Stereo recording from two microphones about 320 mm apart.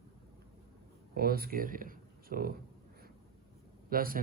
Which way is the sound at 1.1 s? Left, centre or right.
Right.